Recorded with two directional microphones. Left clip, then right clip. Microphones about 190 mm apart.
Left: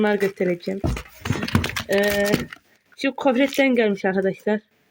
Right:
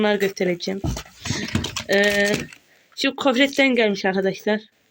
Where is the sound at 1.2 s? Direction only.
10° left (ahead or behind).